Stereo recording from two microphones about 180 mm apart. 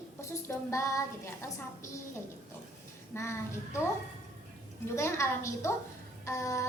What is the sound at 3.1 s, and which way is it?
Speech, 15° left (ahead or behind).